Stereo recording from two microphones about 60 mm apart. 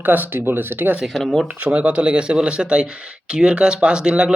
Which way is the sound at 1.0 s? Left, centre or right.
Centre.